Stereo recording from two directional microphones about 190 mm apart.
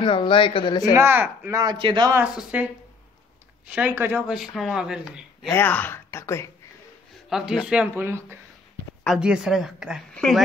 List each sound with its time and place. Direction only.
0.0 s speech: 25° left (ahead or behind)
0.9 s speech: 10° right (ahead or behind)
1.6 s a man's voice: 25° right (ahead or behind)
2.1 s speech: 10° right (ahead or behind)
5.5 s speech: 10° left (ahead or behind)
7.2 s speech: centre (ahead or behind)